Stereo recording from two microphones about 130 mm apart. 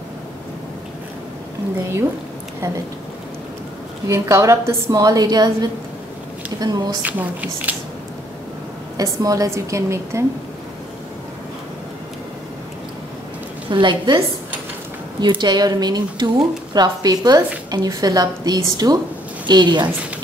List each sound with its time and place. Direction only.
4.1 s a woman's voice: 25° right (ahead or behind)
7.1 s speech: 10° right (ahead or behind)
8.9 s a woman's voice: 25° right (ahead or behind)
13.7 s speech: 35° right (ahead or behind)